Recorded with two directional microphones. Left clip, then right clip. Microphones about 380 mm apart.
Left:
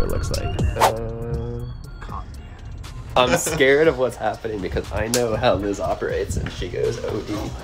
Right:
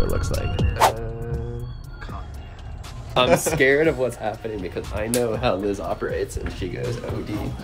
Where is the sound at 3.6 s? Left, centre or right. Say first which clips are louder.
Left 6 dB; centre.